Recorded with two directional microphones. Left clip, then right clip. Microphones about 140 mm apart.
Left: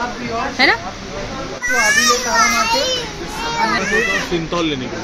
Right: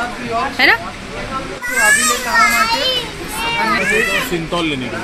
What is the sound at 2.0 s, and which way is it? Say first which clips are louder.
A child's voice: even; 55° left (ahead or behind).